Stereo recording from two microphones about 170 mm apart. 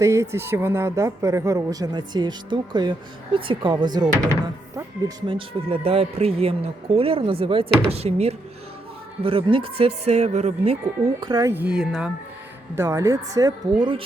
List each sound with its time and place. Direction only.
0.0 s speech: 15° right (ahead or behind)
5.3 s speech: 35° right (ahead or behind)
11.0 s speech: 20° right (ahead or behind); by 12.1 s 5° right (ahead or behind)
12.7 s speech: 15° right (ahead or behind)